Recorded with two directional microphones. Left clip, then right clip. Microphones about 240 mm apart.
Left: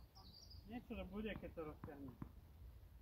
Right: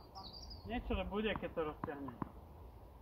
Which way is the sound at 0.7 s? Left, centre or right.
Right.